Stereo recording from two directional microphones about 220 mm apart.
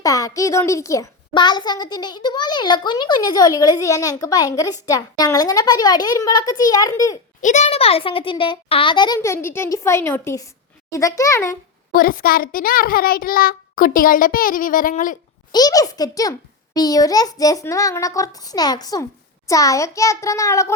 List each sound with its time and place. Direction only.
0.0 s a child's voice: 15° left (ahead or behind)
7.4 s a child's voice: 30° left (ahead or behind); by 11.5 s 15° left (ahead or behind)
11.9 s a child's voice: 40° left (ahead or behind)
15.5 s a child's voice: 15° left (ahead or behind)